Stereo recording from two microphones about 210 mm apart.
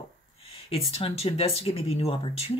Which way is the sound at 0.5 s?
30° left (ahead or behind).